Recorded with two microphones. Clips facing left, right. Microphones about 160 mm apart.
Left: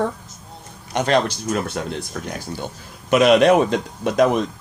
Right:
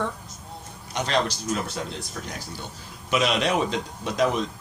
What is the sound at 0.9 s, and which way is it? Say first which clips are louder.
Speech: left 6 dB; 55° left (ahead or behind).